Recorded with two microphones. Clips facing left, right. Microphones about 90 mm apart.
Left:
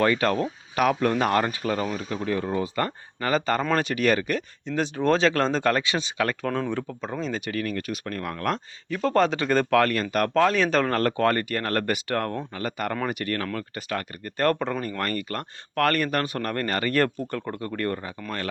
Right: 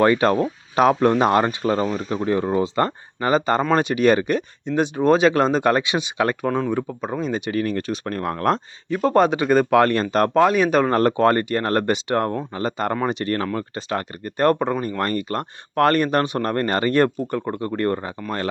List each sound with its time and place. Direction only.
0.0 s speech: 25° right (ahead or behind)
10.3 s speech: 15° right (ahead or behind); by 18.1 s 30° right (ahead or behind)